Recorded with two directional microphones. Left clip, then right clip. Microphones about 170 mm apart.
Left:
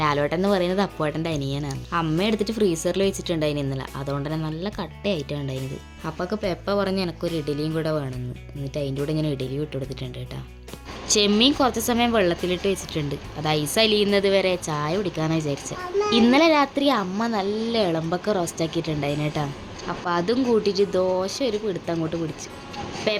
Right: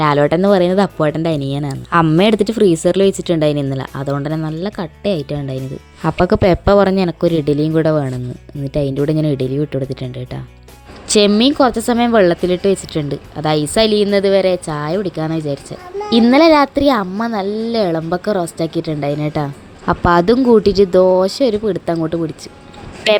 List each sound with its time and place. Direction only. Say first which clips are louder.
0.0 s speech: right 9 dB; 40° right (ahead or behind)
6.0 s speech: right 14 dB; 45° right (ahead or behind)
11.3 s a woman's voice: right 7 dB; 35° right (ahead or behind)
19.9 s speech: right 12 dB; 45° right (ahead or behind)